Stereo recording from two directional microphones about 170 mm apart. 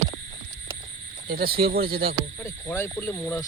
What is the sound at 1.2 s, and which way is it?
Speech, 65° right (ahead or behind).